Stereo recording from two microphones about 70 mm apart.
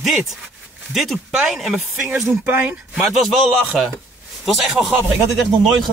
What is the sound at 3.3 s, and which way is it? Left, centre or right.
Speech, centre.